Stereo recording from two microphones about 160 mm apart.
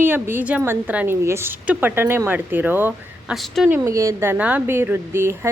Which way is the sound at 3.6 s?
15° right (ahead or behind).